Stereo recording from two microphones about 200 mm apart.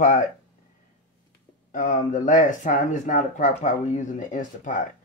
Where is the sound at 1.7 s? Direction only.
40° left (ahead or behind).